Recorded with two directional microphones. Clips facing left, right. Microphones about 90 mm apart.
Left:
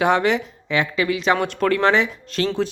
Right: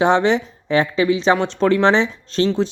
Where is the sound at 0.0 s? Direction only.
25° right (ahead or behind).